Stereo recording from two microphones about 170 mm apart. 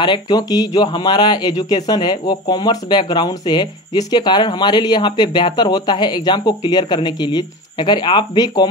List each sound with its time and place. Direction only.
0.0 s speech: 25° left (ahead or behind)